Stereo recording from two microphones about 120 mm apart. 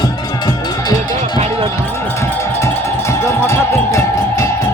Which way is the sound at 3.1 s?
25° left (ahead or behind).